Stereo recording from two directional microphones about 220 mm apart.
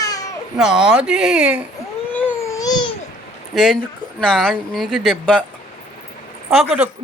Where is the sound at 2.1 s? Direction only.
10° left (ahead or behind).